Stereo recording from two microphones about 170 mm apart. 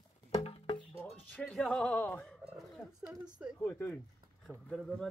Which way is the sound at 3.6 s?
10° left (ahead or behind).